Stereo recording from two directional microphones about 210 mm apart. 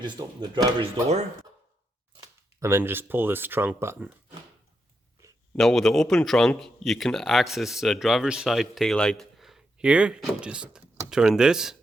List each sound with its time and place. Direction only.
0.0 s speech: 20° right (ahead or behind)
2.2 s speech: 15° right (ahead or behind)
5.5 s a man's voice: centre (ahead or behind)